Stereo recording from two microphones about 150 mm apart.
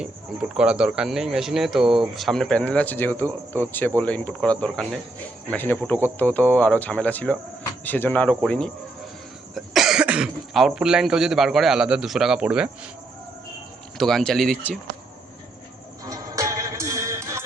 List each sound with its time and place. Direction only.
0.0 s speech: 5° right (ahead or behind)
14.0 s speech: centre (ahead or behind)
16.0 s music: 20° right (ahead or behind)